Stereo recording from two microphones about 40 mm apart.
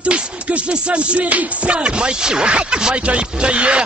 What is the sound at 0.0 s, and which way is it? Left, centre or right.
Speech, right.